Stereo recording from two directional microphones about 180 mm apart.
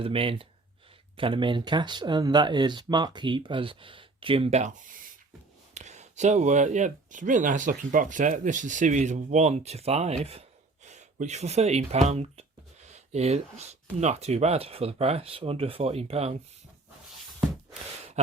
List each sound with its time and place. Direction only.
0.0 s speech: 30° right (ahead or behind)